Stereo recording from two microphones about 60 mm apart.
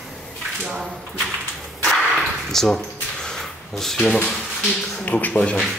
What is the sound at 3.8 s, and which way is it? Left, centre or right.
Speech, centre.